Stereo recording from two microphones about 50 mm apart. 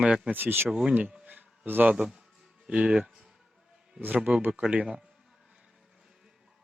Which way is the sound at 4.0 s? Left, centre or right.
Right.